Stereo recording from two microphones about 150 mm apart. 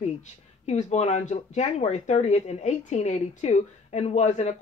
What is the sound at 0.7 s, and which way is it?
Speech, 50° left (ahead or behind).